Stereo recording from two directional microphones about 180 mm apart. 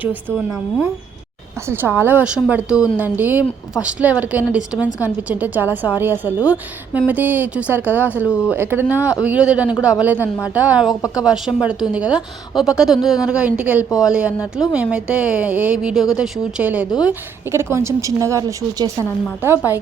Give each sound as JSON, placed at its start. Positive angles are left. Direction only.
{"t": 0.0, "sound": "speech", "side_deg": -10}
{"t": 11.0, "sound": "speech", "side_deg": 20}
{"t": 11.3, "sound": "a woman's voice", "side_deg": -5}